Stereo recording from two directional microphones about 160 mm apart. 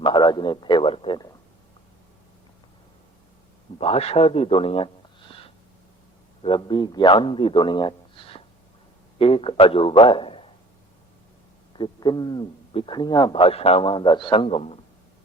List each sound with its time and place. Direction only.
0.0 s a man's voice: 30° left (ahead or behind)
3.8 s a man's voice: 40° left (ahead or behind)
6.4 s a man's voice: 30° left (ahead or behind)
11.7 s a man's voice: 25° left (ahead or behind)